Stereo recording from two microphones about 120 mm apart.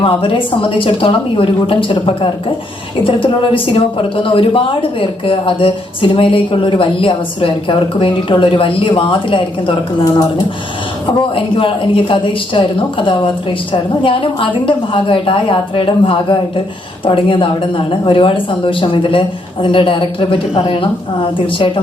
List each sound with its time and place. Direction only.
0.0 s speech: 45° left (ahead or behind)
11.2 s speech: 45° left (ahead or behind)